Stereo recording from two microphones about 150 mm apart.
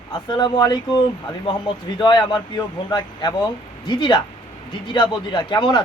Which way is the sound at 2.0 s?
30° left (ahead or behind).